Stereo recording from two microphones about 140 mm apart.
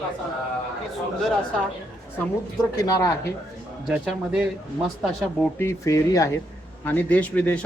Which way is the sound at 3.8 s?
5° right (ahead or behind).